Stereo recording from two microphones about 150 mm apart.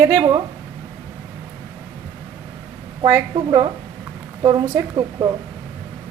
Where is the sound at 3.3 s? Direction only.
30° right (ahead or behind).